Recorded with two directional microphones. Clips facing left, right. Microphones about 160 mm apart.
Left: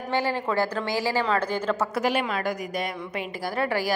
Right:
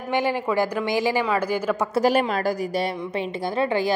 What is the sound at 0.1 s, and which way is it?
A woman's voice, 15° right (ahead or behind).